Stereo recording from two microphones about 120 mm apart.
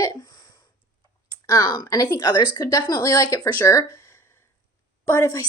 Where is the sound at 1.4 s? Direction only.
25° left (ahead or behind).